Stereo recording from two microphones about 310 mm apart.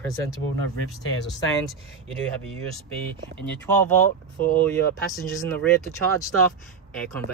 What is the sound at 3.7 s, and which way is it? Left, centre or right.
Speech, centre.